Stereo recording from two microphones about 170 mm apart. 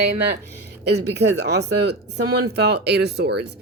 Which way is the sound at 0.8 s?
80° right.